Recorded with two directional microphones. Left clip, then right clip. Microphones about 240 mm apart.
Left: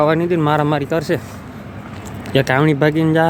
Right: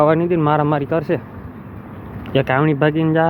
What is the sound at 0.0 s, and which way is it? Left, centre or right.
Speech, centre.